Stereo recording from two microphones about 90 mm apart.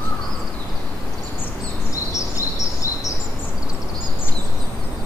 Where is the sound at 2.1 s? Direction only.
35° left (ahead or behind).